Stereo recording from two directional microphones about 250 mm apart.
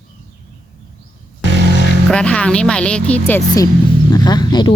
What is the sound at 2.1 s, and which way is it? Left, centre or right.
Speech, centre.